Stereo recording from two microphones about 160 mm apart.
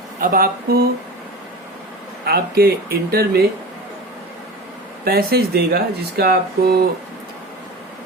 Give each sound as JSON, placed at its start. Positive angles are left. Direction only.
{"t": 0.2, "sound": "speech", "side_deg": -60}
{"t": 2.2, "sound": "speech", "side_deg": -75}
{"t": 5.0, "sound": "speech", "side_deg": -75}